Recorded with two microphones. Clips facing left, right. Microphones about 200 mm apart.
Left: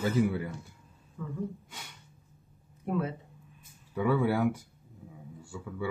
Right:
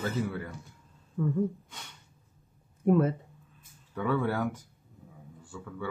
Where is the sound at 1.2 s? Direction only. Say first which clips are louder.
Right 10 dB; 55° right (ahead or behind).